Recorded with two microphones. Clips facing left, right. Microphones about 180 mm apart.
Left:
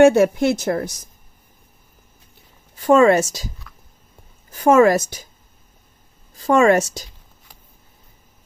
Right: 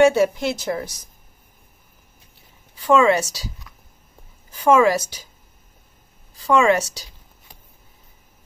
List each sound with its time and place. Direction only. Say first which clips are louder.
0.0 s a woman's voice: left 3 dB; 50° left (ahead or behind)
2.7 s a woman's voice: left 3 dB; 50° left (ahead or behind)
6.3 s a woman's voice: left 3 dB; 45° left (ahead or behind)